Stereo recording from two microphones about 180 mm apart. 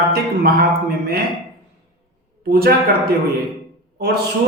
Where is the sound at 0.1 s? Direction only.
55° right (ahead or behind).